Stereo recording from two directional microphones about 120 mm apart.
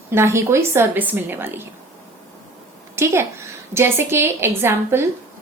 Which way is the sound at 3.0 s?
20° right (ahead or behind).